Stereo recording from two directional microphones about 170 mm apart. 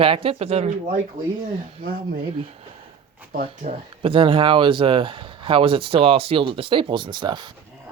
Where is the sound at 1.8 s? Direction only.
55° right (ahead or behind).